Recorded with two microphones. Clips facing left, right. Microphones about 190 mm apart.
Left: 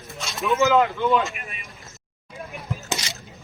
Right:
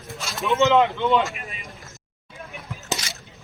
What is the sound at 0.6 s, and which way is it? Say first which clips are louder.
Speech: right 1 dB; 20° right (ahead or behind).